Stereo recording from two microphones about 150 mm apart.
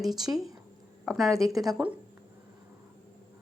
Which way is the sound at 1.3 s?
20° right (ahead or behind).